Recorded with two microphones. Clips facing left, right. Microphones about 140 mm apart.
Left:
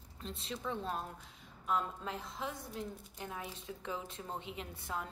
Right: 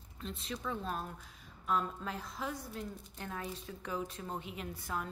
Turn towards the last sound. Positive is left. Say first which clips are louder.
# right 2 dB
turn(degrees=25)  # may be behind; listen again after turning